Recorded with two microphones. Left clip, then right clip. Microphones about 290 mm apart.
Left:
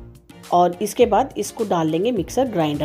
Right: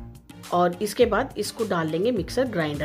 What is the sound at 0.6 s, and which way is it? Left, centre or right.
Speech, centre.